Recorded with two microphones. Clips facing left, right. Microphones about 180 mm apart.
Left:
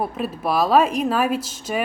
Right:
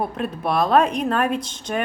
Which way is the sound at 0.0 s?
5° left (ahead or behind).